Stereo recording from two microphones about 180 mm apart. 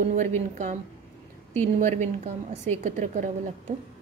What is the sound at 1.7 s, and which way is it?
A woman's voice, 40° right (ahead or behind).